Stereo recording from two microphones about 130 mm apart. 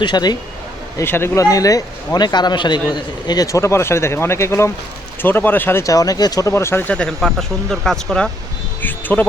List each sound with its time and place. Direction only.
0.0 s a man's voice: 35° left (ahead or behind)
0.9 s a man's voice: 20° left (ahead or behind)